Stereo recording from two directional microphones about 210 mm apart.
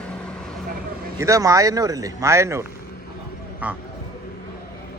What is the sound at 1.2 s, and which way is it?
Speech, 15° right (ahead or behind).